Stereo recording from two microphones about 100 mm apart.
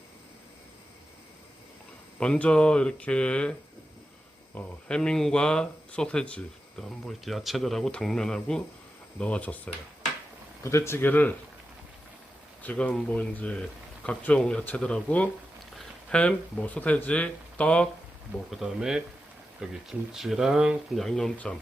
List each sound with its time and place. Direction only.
2.1 s speech: 10° left (ahead or behind)
4.5 s speech: 10° left (ahead or behind)
10.6 s speech: 25° left (ahead or behind)
12.6 s speech: 15° left (ahead or behind)
18.5 s speech: 5° right (ahead or behind)